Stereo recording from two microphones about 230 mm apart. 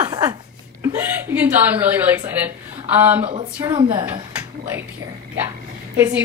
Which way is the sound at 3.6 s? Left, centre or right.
Centre.